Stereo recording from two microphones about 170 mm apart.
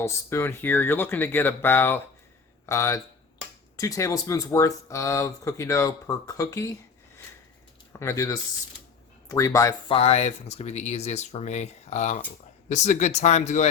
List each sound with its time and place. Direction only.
0.0 s speech: 15° left (ahead or behind)
7.9 s speech: 20° left (ahead or behind)
9.9 s speech: 35° left (ahead or behind)